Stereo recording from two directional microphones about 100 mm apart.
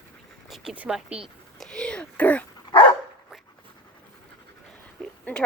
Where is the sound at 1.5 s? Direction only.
5° left (ahead or behind).